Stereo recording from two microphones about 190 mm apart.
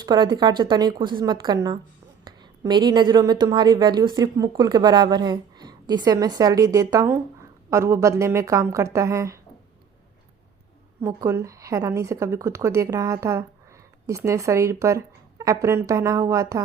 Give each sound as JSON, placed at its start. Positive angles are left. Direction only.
{"t": 0.0, "sound": "speech", "side_deg": -25}
{"t": 11.0, "sound": "speech", "side_deg": -15}